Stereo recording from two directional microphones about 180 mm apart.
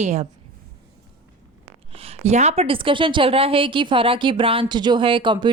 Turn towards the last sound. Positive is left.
turn(degrees=-25)  # may be behind; listen again after turning